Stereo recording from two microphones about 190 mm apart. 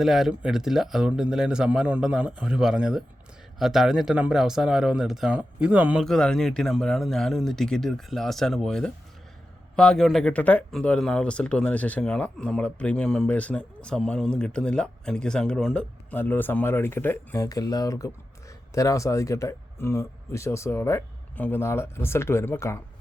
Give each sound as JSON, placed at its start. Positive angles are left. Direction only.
{"t": 0.0, "sound": "speech", "side_deg": 0}